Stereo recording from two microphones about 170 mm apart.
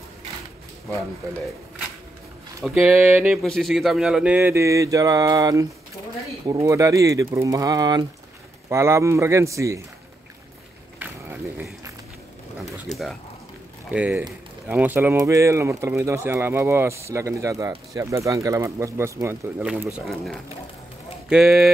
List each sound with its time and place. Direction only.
2.6 s speech: centre (ahead or behind); by 9.8 s 20° right (ahead or behind)
12.9 s speech: centre (ahead or behind)